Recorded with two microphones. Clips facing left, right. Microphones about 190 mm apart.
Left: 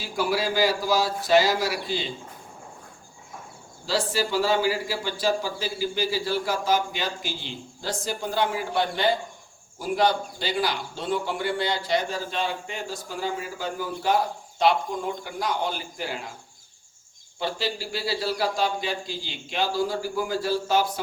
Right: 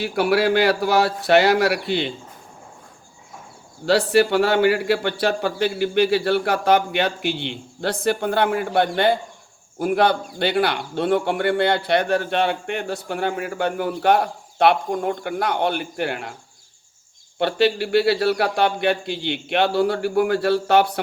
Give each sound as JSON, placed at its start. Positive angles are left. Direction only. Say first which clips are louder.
{"t": 0.0, "sound": "a man's voice", "louder": "right 7 dB", "side_deg": -65}
{"t": 4.1, "sound": "a man's voice", "louder": "right 6 dB", "side_deg": -65}
{"t": 17.4, "sound": "a man's voice", "louder": "right 10 dB", "side_deg": -65}